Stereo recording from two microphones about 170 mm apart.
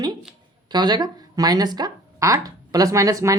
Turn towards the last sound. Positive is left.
turn(degrees=-20)  # may be behind; listen again after turning